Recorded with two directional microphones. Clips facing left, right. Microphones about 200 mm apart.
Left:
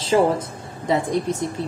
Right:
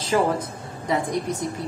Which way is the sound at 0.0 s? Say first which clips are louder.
Left 3 dB; 25° left (ahead or behind).